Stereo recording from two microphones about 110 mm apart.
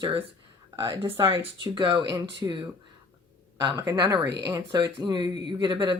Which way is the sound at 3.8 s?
30° right (ahead or behind).